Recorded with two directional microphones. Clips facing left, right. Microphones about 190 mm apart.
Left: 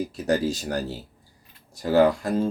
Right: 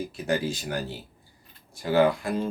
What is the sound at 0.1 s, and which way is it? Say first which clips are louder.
Speech: left 2 dB; 40° left (ahead or behind).